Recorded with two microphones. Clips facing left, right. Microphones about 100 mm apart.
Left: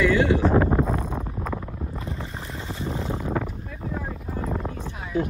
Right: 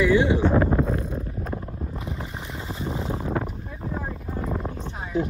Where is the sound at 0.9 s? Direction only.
90° left.